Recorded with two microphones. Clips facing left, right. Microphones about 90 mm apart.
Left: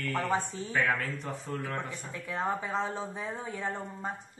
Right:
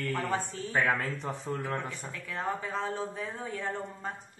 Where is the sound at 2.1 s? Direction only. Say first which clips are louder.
Left 3 dB; 20° left (ahead or behind).